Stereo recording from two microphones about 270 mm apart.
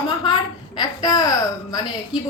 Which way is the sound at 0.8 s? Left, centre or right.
Centre.